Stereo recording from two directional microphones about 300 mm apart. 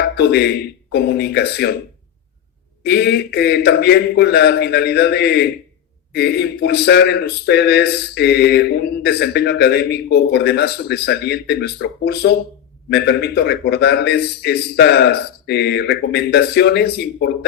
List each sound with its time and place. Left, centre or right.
0.2 s a man's voice: left
2.8 s a man's voice: left